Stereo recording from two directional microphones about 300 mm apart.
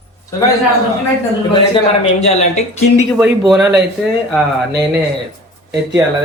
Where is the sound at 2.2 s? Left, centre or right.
Left.